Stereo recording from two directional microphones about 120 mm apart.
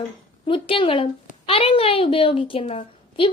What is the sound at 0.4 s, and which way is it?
A woman's voice, 45° left (ahead or behind).